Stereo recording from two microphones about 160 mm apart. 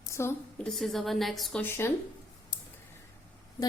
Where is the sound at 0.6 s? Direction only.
5° left (ahead or behind).